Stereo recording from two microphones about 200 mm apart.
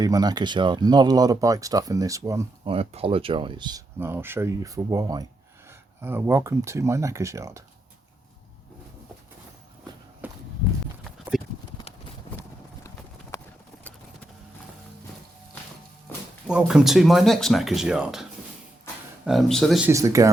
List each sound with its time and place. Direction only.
0.0 s speech: 20° right (ahead or behind)
2.6 s speech: 30° right (ahead or behind)
10.2 s walk: 10° right (ahead or behind)
11.3 s clip-clop: centre (ahead or behind)
13.3 s clip-clop: 15° left (ahead or behind)
16.5 s speech: 5° right (ahead or behind)
19.9 s speech: 15° right (ahead or behind)